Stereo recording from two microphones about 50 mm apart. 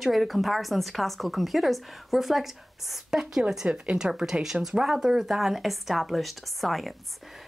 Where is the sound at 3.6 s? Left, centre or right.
Right.